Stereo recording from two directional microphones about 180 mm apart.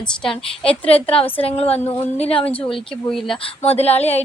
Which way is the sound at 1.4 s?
35° left (ahead or behind).